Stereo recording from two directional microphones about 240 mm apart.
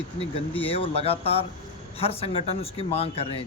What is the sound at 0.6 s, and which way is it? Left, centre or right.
Speech, left.